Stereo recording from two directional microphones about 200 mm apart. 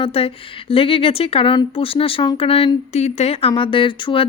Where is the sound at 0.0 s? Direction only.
30° left (ahead or behind).